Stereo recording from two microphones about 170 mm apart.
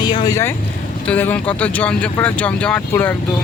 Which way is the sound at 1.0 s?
10° left (ahead or behind).